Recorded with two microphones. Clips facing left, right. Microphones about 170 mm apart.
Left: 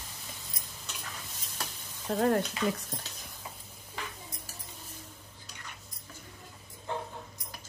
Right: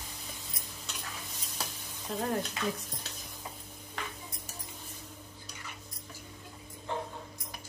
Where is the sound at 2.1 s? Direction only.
55° left (ahead or behind).